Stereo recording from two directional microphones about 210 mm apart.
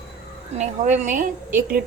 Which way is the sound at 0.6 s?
35° right (ahead or behind).